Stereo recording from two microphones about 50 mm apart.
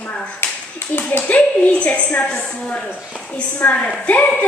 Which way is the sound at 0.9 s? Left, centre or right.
Left.